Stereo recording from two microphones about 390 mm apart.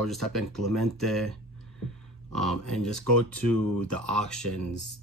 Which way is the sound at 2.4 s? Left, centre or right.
Centre.